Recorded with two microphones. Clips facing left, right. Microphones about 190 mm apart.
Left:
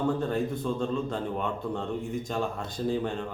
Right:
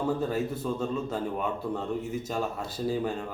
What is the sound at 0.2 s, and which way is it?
A man's voice, 5° right (ahead or behind).